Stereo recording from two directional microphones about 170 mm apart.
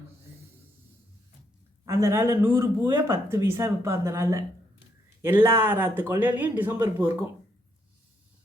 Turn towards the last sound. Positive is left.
turn(degrees=-10)  # may be behind; listen again after turning